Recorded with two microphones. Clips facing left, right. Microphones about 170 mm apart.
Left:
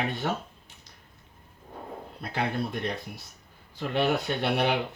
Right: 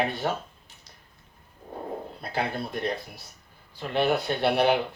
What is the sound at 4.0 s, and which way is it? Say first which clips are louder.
Speech: right 3 dB; 35° right (ahead or behind).